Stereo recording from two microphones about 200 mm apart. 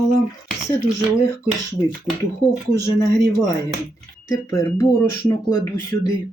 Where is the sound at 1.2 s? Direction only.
15° left (ahead or behind).